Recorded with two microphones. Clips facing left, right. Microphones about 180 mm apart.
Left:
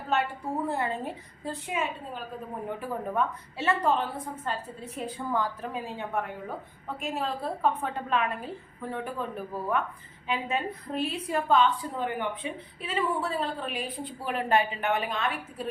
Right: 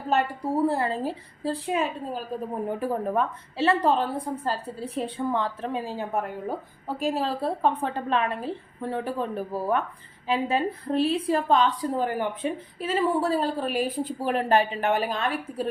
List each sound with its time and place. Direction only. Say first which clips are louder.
0.1 s a woman's voice: right 4 dB; 35° right (ahead or behind)